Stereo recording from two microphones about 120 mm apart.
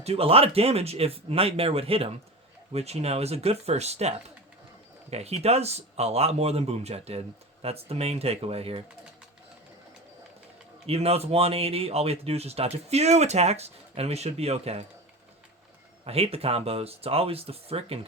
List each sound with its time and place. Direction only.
0.0 s speech: 55° right (ahead or behind)
5.1 s speech: 60° right (ahead or behind)
10.8 s speech: 55° right (ahead or behind)
16.0 s speech: 55° right (ahead or behind)